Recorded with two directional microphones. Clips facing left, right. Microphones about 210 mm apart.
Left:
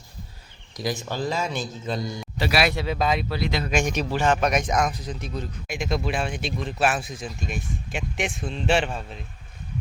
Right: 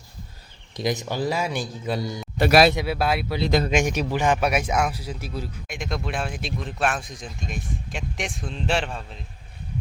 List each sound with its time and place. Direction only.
0.8 s a man's voice: 20° right (ahead or behind)
2.4 s a man's voice: 50° right (ahead or behind)
2.7 s a man's voice: 10° right (ahead or behind)